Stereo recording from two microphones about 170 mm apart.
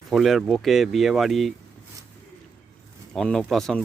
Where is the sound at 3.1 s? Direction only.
5° left (ahead or behind).